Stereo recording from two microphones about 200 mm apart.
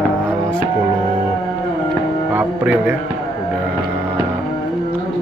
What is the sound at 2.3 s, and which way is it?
Speech, 10° right (ahead or behind).